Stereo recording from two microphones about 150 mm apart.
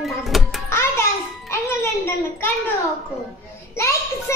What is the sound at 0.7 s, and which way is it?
Music, 15° left (ahead or behind).